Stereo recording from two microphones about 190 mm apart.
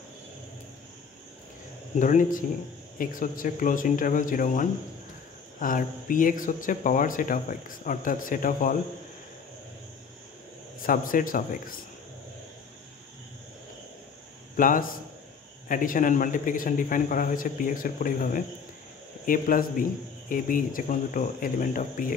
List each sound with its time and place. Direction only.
2.0 s speech: 40° left (ahead or behind)
10.9 s speech: 45° left (ahead or behind)
14.6 s speech: 45° left (ahead or behind)